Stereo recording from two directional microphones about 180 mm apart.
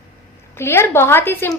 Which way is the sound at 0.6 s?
15° left (ahead or behind).